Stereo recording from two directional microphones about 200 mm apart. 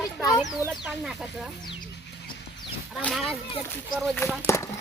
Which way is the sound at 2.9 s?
Centre (ahead or behind).